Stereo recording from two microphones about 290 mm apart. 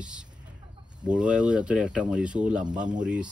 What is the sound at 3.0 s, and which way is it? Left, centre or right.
Speech, centre.